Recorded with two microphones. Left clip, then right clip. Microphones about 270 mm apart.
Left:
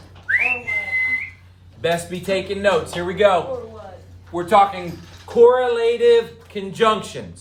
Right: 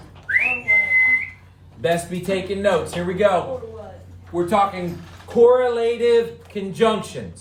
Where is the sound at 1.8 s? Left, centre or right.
Centre.